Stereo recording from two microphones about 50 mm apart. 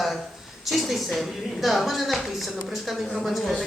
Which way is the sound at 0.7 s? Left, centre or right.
Centre.